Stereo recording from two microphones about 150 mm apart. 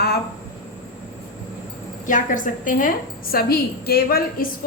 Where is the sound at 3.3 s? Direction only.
90° left.